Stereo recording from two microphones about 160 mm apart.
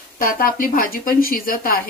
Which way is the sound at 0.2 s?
60° left (ahead or behind).